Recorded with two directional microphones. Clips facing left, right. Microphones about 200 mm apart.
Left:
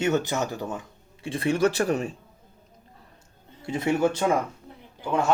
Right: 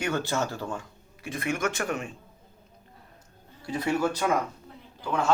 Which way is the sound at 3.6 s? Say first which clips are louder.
Left 3 dB; 25° left (ahead or behind).